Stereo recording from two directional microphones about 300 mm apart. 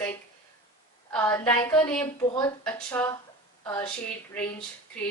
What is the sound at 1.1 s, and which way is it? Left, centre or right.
A woman's voice, centre.